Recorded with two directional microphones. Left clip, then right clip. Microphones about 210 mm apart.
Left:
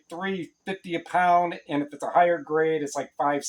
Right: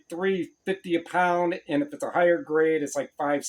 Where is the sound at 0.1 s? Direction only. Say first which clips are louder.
Right 4 dB; 20° left (ahead or behind).